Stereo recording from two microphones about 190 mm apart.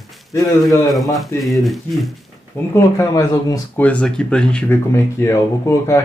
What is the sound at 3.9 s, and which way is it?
Speech, 5° left (ahead or behind).